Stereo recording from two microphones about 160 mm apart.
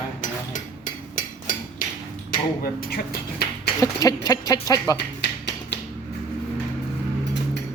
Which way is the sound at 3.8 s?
20° left (ahead or behind).